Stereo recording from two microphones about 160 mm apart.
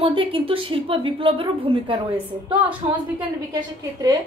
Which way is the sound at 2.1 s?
10° right (ahead or behind).